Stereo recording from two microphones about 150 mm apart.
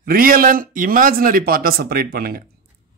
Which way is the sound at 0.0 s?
75° right (ahead or behind).